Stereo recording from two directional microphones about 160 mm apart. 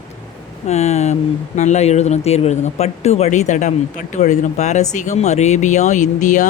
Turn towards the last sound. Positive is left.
turn(degrees=50)  # may be behind; listen again after turning